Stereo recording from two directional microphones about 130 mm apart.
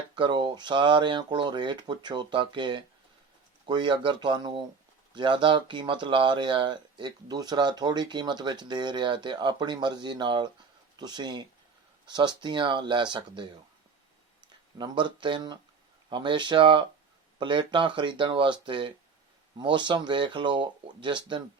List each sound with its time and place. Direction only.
0.2 s speech: 35° right (ahead or behind)
14.8 s speech: 35° right (ahead or behind)